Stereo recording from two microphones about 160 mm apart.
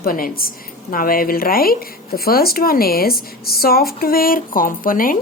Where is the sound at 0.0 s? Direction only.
65° left (ahead or behind).